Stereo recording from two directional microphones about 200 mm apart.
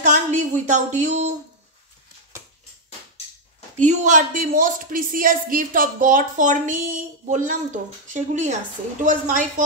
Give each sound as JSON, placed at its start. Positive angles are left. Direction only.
{"t": 0.0, "sound": "speech", "side_deg": -40}
{"t": 3.8, "sound": "speech", "side_deg": -40}